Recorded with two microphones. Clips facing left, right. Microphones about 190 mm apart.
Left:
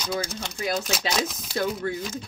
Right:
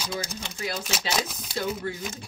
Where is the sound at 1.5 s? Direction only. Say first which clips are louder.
Left 3 dB; 50° left (ahead or behind).